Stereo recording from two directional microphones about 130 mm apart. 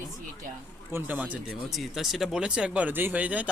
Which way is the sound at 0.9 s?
15° right (ahead or behind).